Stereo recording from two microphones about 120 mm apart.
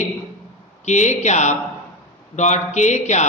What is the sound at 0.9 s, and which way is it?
A man's voice, 80° left.